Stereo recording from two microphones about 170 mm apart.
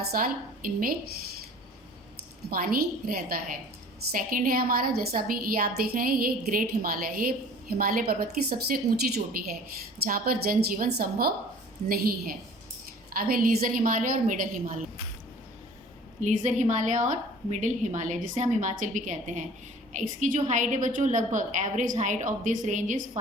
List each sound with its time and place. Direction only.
0.1 s a woman's voice: 55° right (ahead or behind)
2.5 s a woman's voice: 60° right (ahead or behind)
16.2 s a woman's voice: 45° right (ahead or behind)